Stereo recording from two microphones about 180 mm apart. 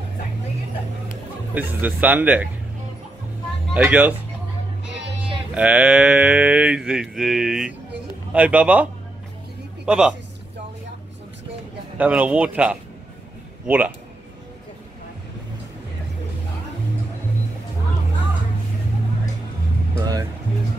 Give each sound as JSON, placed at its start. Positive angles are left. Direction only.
{"t": 1.5, "sound": "speech", "side_deg": -10}
{"t": 3.7, "sound": "speech", "side_deg": -5}
{"t": 5.5, "sound": "speech", "side_deg": -5}
{"t": 9.8, "sound": "speech", "side_deg": -5}
{"t": 12.0, "sound": "speech", "side_deg": -10}
{"t": 20.0, "sound": "music", "side_deg": -20}